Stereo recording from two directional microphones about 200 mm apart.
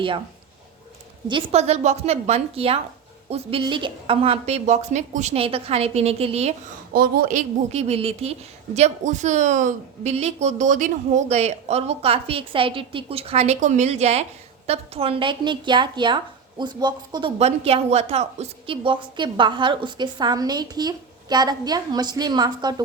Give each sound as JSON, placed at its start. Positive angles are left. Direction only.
{"t": 1.3, "sound": "a woman's voice", "side_deg": -25}
{"t": 6.9, "sound": "a woman's voice", "side_deg": -50}